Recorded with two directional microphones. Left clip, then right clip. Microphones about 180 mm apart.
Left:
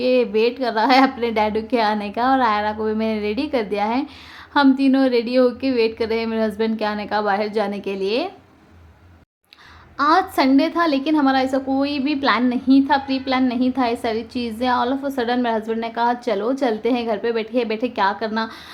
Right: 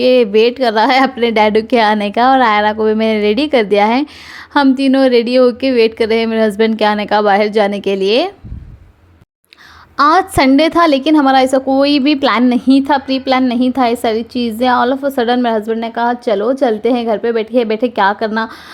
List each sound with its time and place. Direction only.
0.0 s a woman's voice: 40° right (ahead or behind)
10.0 s a woman's voice: 40° right (ahead or behind)